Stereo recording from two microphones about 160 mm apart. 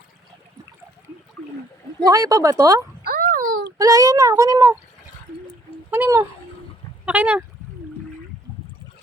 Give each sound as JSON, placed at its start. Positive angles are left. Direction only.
{"t": 2.0, "sound": "speech", "side_deg": -20}
{"t": 3.0, "sound": "a sound", "side_deg": -70}
{"t": 3.8, "sound": "speech", "side_deg": -20}
{"t": 5.9, "sound": "speech", "side_deg": -15}